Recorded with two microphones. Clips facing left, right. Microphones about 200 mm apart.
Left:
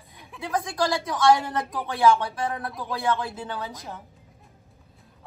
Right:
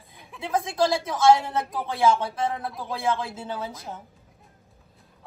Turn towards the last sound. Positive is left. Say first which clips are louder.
# even
turn(degrees=-25)  # may be behind; listen again after turning